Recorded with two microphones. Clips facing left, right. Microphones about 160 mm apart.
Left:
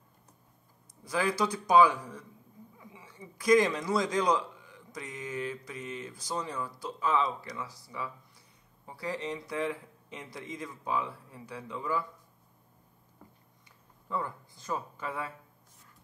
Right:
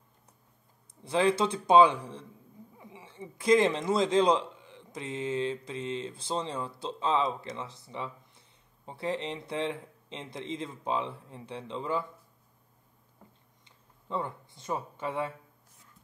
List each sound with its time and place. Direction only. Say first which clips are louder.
1.0 s speech: right 4 dB; 25° right (ahead or behind)
14.0 s speech: right 1 dB; 25° right (ahead or behind)